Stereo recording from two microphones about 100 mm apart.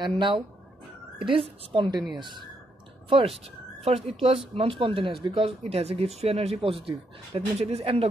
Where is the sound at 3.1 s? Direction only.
85° right.